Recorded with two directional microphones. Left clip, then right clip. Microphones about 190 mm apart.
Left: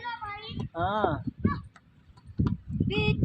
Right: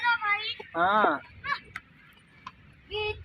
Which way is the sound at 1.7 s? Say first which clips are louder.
Right 15 dB; 25° left (ahead or behind).